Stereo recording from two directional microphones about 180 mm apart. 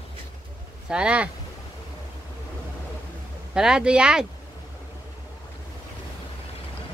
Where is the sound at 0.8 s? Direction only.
5° right (ahead or behind).